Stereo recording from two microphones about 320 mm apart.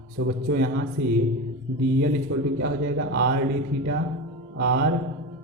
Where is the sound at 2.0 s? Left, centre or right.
Right.